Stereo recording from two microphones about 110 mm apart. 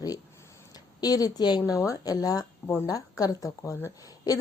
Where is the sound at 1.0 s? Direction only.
35° left (ahead or behind).